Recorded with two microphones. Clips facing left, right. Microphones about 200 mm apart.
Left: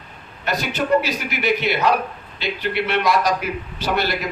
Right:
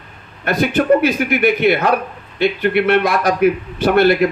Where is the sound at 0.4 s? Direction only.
55° right (ahead or behind).